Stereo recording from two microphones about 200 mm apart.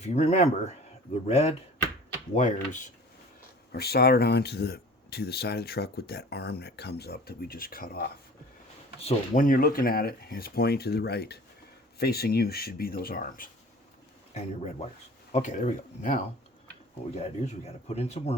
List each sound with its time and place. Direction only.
0.0 s speech: 35° left (ahead or behind)
3.7 s speech: 50° left (ahead or behind)
9.0 s speech: 35° left (ahead or behind)
14.3 s speech: 35° left (ahead or behind)